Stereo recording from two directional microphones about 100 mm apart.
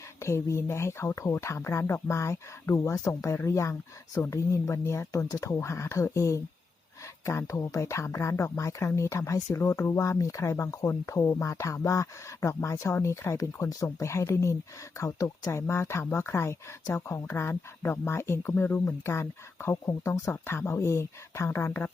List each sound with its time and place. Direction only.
0.2 s speech: 25° left (ahead or behind)